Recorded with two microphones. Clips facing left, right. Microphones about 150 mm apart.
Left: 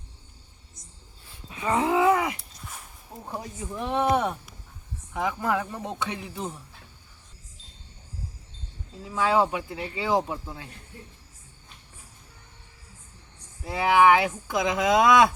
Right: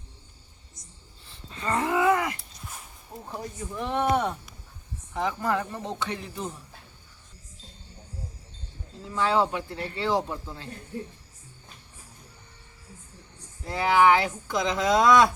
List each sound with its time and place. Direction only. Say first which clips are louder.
1.5 s a sound: left 3 dB; 10° left (ahead or behind)
3.2 s speech: left 1 dB; 15° left (ahead or behind)
9.0 s speech: left 1 dB; 10° left (ahead or behind)
13.7 s a woman's voice: left 1 dB; 15° left (ahead or behind)